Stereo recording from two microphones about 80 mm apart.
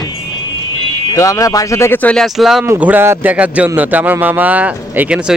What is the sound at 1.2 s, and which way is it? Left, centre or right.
Speech, left.